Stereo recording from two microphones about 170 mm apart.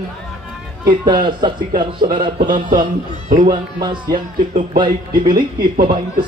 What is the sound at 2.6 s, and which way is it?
Speech, 50° right (ahead or behind).